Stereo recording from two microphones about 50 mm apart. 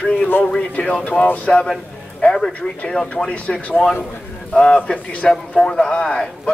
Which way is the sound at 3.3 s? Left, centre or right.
Left.